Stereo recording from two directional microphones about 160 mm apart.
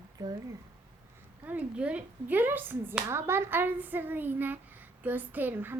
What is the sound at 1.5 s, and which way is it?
Speech, 10° right (ahead or behind).